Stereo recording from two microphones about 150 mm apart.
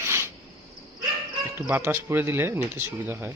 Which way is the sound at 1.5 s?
15° right (ahead or behind).